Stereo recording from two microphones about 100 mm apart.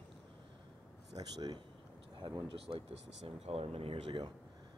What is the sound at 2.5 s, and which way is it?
Speech, 70° right (ahead or behind).